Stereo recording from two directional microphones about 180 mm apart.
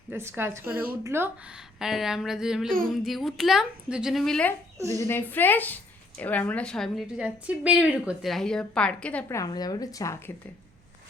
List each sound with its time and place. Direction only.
0.1 s a woman's voice: 15° right (ahead or behind)
2.6 s speech: 50° right (ahead or behind)
2.9 s a woman's voice: centre (ahead or behind)
4.9 s a woman's voice: 15° left (ahead or behind)
9.4 s speech: 20° left (ahead or behind)